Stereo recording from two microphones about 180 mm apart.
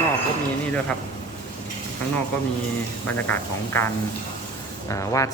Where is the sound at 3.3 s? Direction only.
10° left (ahead or behind).